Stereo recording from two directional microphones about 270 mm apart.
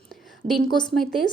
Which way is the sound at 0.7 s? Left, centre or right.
Centre.